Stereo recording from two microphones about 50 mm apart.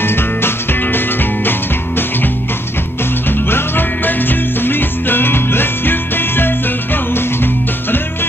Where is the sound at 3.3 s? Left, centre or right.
Left.